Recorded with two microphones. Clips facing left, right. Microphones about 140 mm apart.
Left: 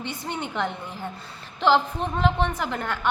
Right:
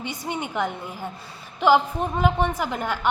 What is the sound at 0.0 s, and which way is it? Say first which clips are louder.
A woman's voice: right 1 dB; 10° right (ahead or behind).